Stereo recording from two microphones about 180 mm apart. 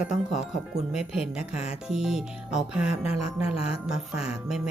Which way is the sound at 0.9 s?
5° right (ahead or behind).